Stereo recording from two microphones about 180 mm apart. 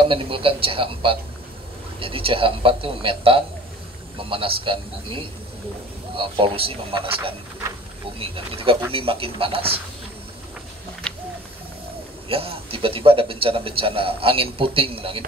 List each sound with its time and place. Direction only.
0.0 s a man's voice: 30° right (ahead or behind)
12.3 s a man's voice: 30° right (ahead or behind)